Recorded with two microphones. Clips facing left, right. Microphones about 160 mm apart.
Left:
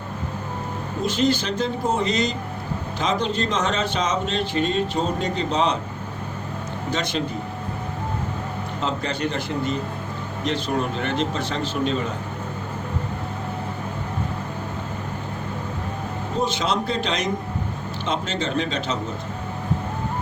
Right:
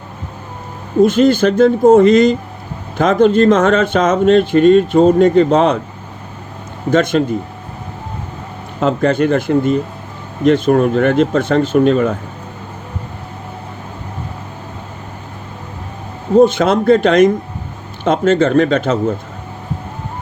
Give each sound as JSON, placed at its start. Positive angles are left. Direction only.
{"t": 1.0, "sound": "speech", "side_deg": -50}
{"t": 6.9, "sound": "speech", "side_deg": -50}
{"t": 8.8, "sound": "speech", "side_deg": -50}
{"t": 16.4, "sound": "speech", "side_deg": -55}